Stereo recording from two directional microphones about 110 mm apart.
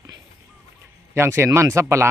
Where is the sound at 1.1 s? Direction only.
25° right (ahead or behind).